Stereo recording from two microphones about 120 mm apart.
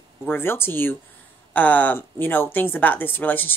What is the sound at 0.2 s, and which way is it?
A woman's voice, 20° left (ahead or behind).